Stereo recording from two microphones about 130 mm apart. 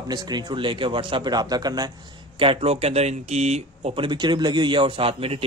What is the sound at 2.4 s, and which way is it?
Speech, 45° right (ahead or behind).